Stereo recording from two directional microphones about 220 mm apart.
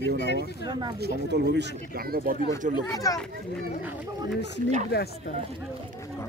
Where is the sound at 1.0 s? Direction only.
50° right (ahead or behind).